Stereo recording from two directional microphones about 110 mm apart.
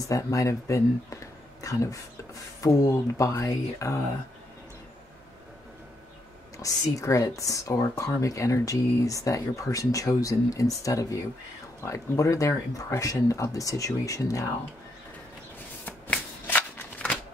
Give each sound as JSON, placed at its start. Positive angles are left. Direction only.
{"t": 0.1, "sound": "speech", "side_deg": 30}
{"t": 6.6, "sound": "speech", "side_deg": 30}
{"t": 15.8, "sound": "shuffling cards", "side_deg": 15}